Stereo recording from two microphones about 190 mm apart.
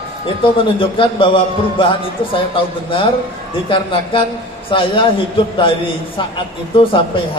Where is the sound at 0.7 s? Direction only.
25° left (ahead or behind).